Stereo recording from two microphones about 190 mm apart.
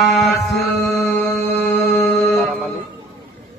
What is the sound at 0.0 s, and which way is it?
Mantra, centre (ahead or behind).